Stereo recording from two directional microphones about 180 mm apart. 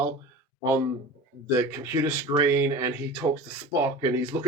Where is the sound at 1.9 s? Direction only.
15° right (ahead or behind).